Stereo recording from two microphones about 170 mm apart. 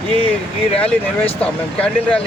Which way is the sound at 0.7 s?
35° left (ahead or behind).